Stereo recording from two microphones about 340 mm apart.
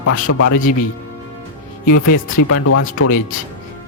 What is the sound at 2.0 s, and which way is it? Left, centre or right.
Speech, left.